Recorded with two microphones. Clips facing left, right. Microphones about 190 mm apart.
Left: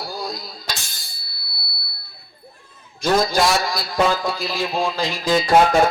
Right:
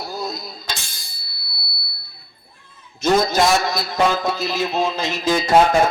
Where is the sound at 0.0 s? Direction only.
25° right (ahead or behind).